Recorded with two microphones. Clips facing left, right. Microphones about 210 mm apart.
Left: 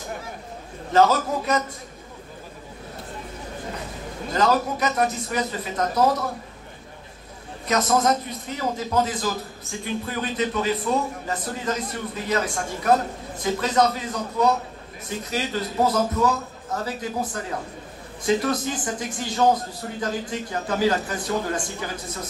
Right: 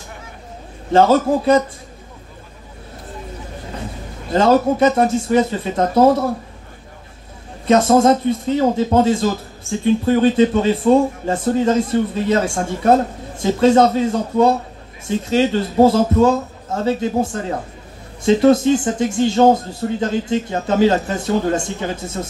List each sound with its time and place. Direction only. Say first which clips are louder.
0.9 s speech: right 6 dB; 30° right (ahead or behind)
4.3 s speech: right 8 dB; 30° right (ahead or behind)
7.6 s speech: right 9 dB; 30° right (ahead or behind)